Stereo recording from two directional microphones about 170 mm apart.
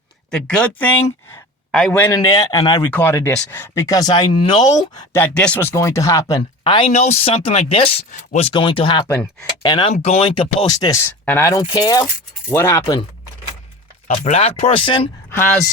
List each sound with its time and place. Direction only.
0.3 s speech: 5° left (ahead or behind)
2.1 s speech: 20° left (ahead or behind)
4.9 s speech: 15° left (ahead or behind); by 8.0 s 35° left (ahead or behind)
8.1 s speech: 45° left (ahead or behind)
8.4 s speech: 30° left (ahead or behind)
9.0 s speech: 10° left (ahead or behind)
9.6 s speech: 25° left (ahead or behind)
9.9 s speech: 35° left (ahead or behind)
10.7 s speech: 20° left (ahead or behind)
14.1 s speech: 40° left (ahead or behind)